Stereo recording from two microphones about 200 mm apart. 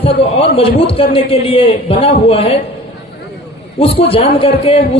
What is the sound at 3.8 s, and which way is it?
A man's voice, 30° left (ahead or behind).